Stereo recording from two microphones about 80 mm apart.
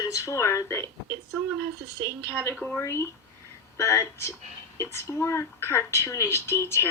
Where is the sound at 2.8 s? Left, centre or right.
Left.